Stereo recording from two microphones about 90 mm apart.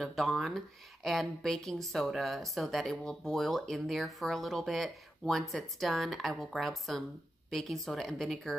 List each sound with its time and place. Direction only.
0.0 s speech: centre (ahead or behind)